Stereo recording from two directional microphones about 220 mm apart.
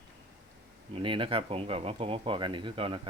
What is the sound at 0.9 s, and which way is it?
Speech, 25° right (ahead or behind).